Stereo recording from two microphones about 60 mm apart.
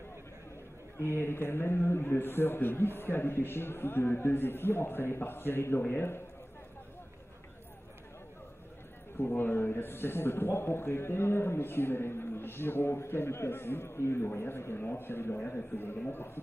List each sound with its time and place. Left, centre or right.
0.9 s speech: left
9.1 s speech: left
15.3 s speech: left